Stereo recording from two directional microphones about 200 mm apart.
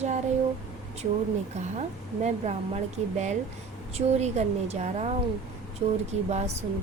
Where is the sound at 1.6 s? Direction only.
35° right (ahead or behind).